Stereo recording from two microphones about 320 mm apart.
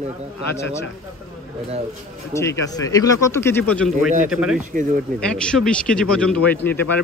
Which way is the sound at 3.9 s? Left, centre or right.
Right.